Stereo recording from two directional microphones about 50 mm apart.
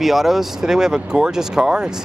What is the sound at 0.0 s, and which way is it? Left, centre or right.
Speech, centre.